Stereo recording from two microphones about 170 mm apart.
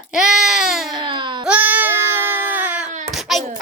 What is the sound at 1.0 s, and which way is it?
Baby cry, 30° right (ahead or behind).